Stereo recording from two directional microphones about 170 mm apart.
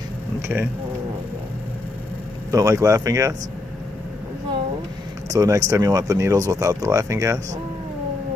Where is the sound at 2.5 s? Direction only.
20° right (ahead or behind).